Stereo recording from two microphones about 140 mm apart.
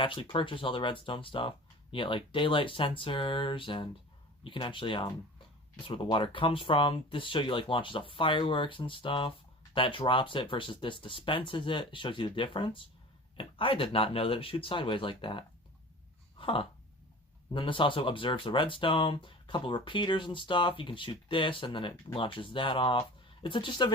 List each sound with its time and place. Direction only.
0.0 s speech: 40° left (ahead or behind)
16.4 s a sound: 40° left (ahead or behind)
17.5 s speech: 35° left (ahead or behind)